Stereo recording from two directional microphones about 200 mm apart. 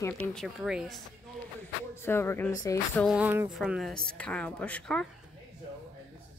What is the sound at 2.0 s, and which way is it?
Speech, 10° left (ahead or behind).